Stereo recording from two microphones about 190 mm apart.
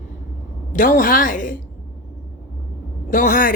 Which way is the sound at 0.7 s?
45° left (ahead or behind).